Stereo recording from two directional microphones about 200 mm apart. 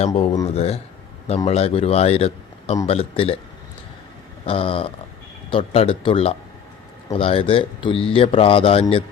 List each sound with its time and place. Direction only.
0.0 s a man's voice: 30° left (ahead or behind)
4.4 s speech: 25° left (ahead or behind)